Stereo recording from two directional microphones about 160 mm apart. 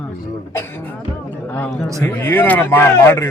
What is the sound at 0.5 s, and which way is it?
Speech, 15° left (ahead or behind).